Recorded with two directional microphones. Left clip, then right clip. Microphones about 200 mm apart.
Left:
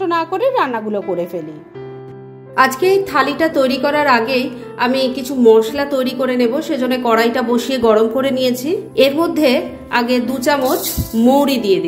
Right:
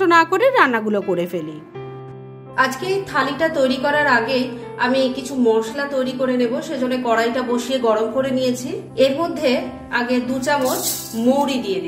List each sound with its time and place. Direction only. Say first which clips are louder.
0.0 s speech: right 2 dB; 20° right (ahead or behind)
2.5 s a woman's voice: left 7 dB; 40° left (ahead or behind)